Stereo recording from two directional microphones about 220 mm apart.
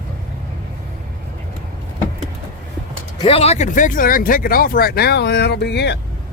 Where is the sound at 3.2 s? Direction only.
25° left (ahead or behind); by 6.0 s 50° left (ahead or behind).